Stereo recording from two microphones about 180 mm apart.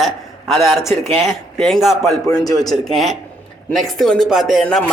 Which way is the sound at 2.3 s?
20° left (ahead or behind).